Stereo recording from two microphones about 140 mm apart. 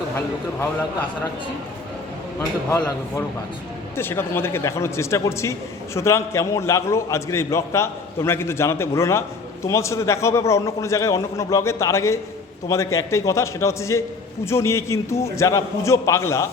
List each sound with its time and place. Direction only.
2.6 s a man's voice: 25° left (ahead or behind)